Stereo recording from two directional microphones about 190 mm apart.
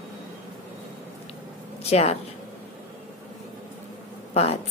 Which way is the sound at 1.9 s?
35° left (ahead or behind).